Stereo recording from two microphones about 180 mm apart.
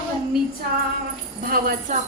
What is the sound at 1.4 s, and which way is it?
Speech, 50° right (ahead or behind).